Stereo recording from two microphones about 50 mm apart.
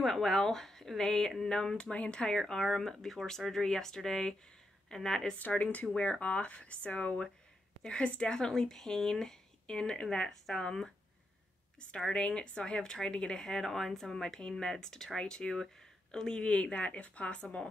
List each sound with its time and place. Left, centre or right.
0.0 s speech: centre; by 2.2 s left
2.2 s a woman's voice: centre
5.6 s a woman's voice: left; by 10.9 s centre
12.0 s a woman's voice: centre